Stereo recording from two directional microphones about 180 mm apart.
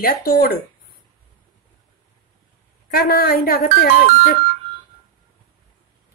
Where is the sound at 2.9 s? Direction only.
55° left (ahead or behind).